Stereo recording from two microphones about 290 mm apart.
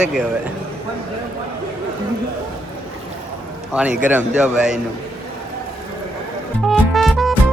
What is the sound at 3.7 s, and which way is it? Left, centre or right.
A man's voice, centre.